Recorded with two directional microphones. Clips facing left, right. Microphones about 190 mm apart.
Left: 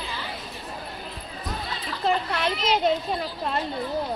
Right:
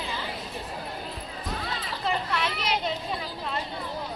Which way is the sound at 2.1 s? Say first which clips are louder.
Left 4 dB; 45° left (ahead or behind).